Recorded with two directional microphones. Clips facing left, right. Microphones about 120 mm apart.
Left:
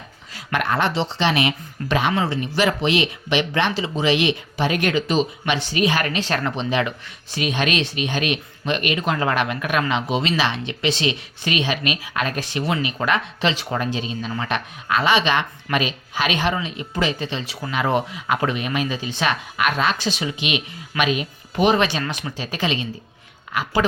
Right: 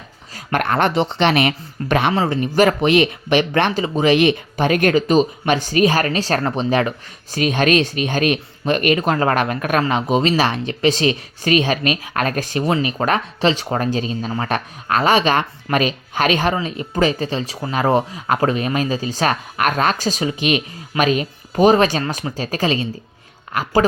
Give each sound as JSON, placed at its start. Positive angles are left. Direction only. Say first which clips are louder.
{"t": 0.3, "sound": "speech", "louder": "right 3 dB", "side_deg": -50}